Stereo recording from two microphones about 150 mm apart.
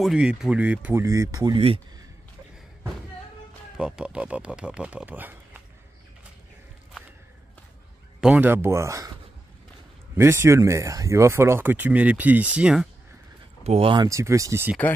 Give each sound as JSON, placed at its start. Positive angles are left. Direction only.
{"t": 0.0, "sound": "speech", "side_deg": -5}
{"t": 1.0, "sound": "speech", "side_deg": -25}
{"t": 3.7, "sound": "speech", "side_deg": -5}
{"t": 8.2, "sound": "speech", "side_deg": -10}
{"t": 10.1, "sound": "speech", "side_deg": -15}
{"t": 13.7, "sound": "speech", "side_deg": -40}
{"t": 14.0, "sound": "speech", "side_deg": -20}